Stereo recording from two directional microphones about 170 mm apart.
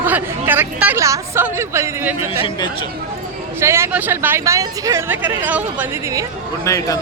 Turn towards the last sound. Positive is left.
turn(degrees=20)  # may be behind; listen again after turning